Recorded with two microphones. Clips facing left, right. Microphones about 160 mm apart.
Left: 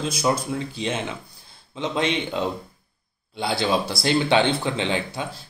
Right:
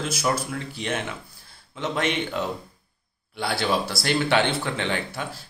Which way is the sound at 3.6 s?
20° left (ahead or behind).